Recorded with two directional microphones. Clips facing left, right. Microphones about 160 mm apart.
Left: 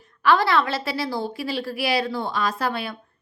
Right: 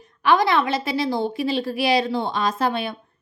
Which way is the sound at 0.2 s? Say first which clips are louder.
Right 1 dB; 20° right (ahead or behind).